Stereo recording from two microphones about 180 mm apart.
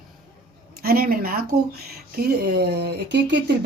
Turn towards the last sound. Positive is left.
turn(degrees=-70)  # may be behind; listen again after turning